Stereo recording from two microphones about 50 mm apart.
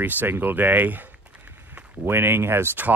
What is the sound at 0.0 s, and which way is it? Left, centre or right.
Speech, right.